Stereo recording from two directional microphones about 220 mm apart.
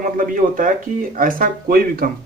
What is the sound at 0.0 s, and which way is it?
Speech, 40° right (ahead or behind).